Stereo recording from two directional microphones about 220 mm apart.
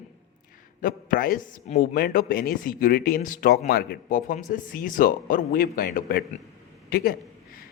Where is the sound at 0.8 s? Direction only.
40° left (ahead or behind).